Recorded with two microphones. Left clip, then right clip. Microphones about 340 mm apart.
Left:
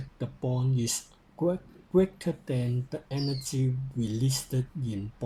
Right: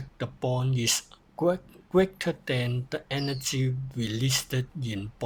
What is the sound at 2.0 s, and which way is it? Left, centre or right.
Speech, right.